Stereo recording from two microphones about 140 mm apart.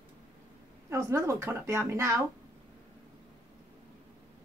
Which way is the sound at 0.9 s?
20° right (ahead or behind).